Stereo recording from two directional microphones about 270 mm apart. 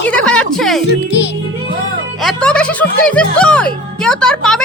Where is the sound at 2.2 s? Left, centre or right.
Centre.